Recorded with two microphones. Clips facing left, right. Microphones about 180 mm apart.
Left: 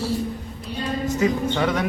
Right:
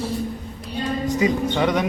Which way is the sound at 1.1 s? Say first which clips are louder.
Right 1 dB; 15° right (ahead or behind).